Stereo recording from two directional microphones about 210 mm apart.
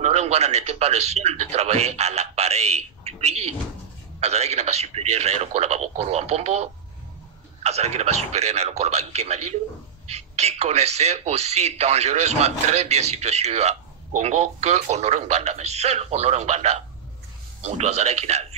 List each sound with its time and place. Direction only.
0.0 s speech: 30° right (ahead or behind)